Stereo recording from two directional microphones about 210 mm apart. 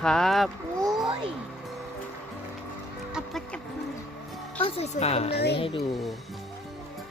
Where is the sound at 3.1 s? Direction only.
Centre (ahead or behind).